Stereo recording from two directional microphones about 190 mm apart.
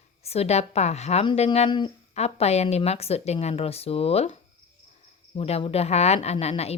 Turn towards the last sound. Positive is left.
turn(degrees=30)  # may be behind; listen again after turning